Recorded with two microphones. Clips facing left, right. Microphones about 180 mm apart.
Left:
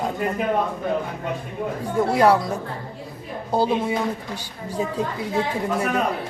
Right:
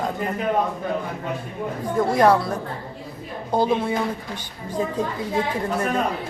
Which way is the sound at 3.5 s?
10° left (ahead or behind).